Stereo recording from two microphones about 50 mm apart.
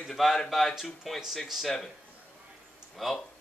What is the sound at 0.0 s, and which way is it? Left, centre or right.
Speech, centre.